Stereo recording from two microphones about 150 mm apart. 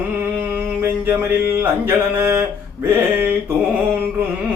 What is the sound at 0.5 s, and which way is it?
Mantra, 15° right (ahead or behind).